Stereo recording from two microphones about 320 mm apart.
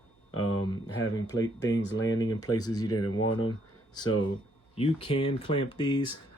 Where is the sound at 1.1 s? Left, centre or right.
Centre.